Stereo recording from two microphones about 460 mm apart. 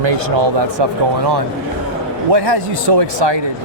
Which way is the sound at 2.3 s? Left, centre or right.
Right.